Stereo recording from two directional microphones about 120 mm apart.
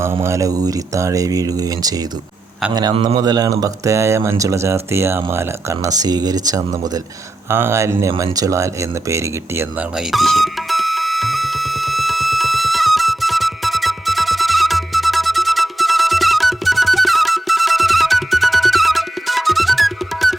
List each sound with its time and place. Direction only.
0.2 s speech: 25° right (ahead or behind)
2.9 s a man's voice: 50° right (ahead or behind)
3.2 s speech: 35° right (ahead or behind)
7.5 s speech: 20° right (ahead or behind)
10.1 s music: centre (ahead or behind)